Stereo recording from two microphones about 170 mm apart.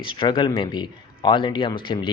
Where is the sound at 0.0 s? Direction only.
30° left (ahead or behind).